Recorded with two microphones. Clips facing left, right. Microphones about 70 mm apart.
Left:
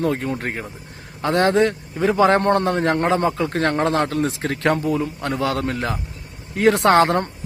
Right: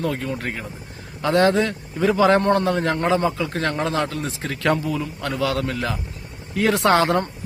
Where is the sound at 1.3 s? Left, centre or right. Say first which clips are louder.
Left 1 dB; left.